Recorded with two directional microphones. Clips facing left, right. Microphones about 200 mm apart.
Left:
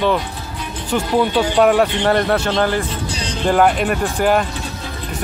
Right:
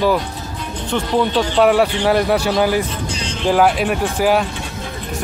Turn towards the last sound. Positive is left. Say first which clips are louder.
# even
turn(degrees=-5)  # may be behind; listen again after turning